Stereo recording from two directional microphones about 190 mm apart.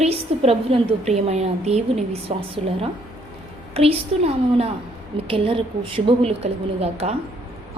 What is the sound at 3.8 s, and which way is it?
A woman's voice, 30° right (ahead or behind).